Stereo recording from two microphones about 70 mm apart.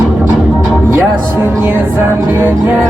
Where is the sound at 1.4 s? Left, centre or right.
Right.